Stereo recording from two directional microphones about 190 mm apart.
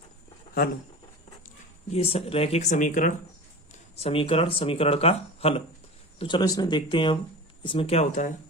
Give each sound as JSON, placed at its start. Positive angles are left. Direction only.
{"t": 1.9, "sound": "speech", "side_deg": 30}
{"t": 3.9, "sound": "speech", "side_deg": 30}